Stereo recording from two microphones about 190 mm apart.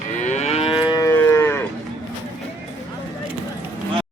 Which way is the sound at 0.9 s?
20° left (ahead or behind).